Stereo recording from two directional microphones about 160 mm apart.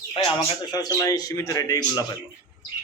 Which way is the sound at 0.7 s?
20° left (ahead or behind).